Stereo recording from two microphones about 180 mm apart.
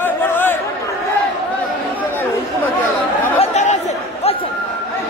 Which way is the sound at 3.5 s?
40° left (ahead or behind).